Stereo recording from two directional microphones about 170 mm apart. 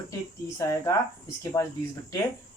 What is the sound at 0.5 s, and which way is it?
Speech, 15° left (ahead or behind).